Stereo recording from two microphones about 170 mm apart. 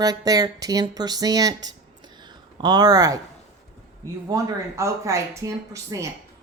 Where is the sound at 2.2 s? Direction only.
25° right (ahead or behind).